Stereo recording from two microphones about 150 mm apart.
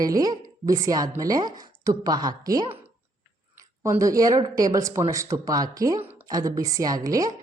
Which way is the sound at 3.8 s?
20° right (ahead or behind).